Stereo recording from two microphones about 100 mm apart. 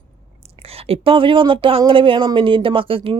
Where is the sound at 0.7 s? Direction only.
75° right (ahead or behind).